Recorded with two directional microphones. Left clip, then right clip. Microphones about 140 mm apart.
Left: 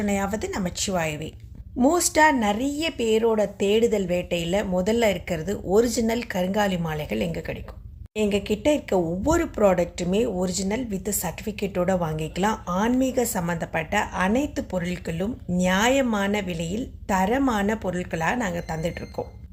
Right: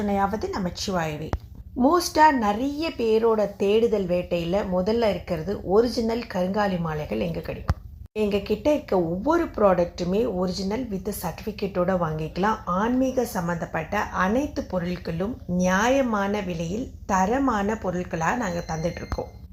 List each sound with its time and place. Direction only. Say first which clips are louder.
0.0 s a woman's voice: right 2 dB; 15° left (ahead or behind)